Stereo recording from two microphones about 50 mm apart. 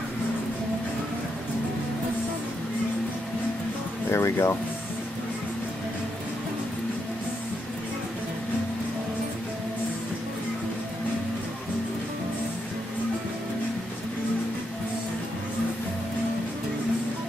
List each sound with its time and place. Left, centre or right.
4.1 s speech: left